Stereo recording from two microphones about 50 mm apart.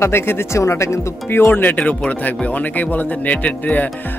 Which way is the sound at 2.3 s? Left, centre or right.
Left.